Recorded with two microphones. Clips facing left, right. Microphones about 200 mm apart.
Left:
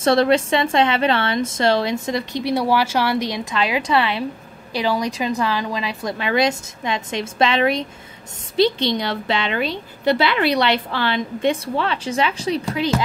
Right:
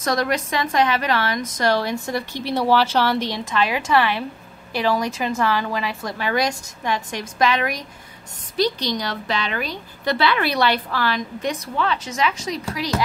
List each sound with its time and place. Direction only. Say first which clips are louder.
0.0 s a woman's voice: left 6 dB; 30° left (ahead or behind)